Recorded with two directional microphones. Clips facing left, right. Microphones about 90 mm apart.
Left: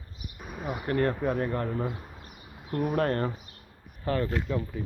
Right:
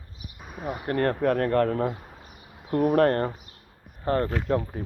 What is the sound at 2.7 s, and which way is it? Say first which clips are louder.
Speech: right 6 dB; 30° right (ahead or behind).